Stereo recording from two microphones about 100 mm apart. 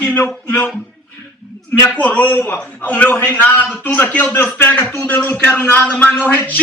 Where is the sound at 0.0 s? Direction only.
15° left (ahead or behind).